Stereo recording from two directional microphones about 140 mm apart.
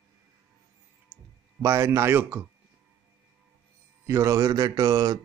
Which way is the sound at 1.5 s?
20° right (ahead or behind).